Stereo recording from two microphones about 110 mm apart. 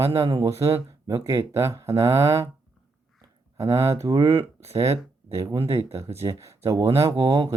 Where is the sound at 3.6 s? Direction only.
25° right (ahead or behind).